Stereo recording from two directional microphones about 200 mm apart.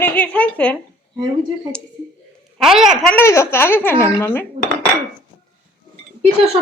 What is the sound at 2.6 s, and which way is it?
Speech, centre (ahead or behind).